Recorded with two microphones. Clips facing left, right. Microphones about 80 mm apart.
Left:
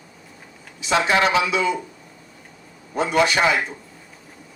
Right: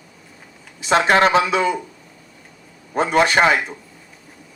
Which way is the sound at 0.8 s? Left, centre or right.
Right.